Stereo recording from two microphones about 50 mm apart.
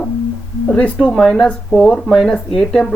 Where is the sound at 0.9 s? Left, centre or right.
Centre.